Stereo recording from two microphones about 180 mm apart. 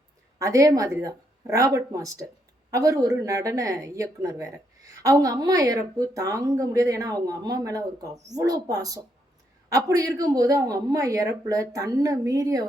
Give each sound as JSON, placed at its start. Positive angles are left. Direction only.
{"t": 0.3, "sound": "a man's voice", "side_deg": -20}